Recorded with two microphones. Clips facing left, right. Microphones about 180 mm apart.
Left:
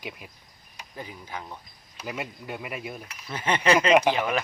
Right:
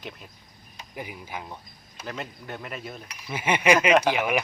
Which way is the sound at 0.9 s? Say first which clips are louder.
Right 1 dB; 15° right (ahead or behind).